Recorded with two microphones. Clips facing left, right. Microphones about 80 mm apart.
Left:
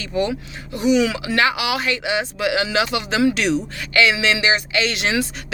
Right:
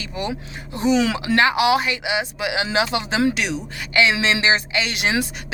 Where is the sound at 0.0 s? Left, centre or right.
Centre.